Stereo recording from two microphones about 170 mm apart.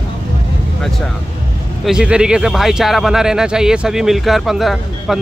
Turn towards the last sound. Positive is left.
turn(degrees=0)  # may be behind; listen again after turning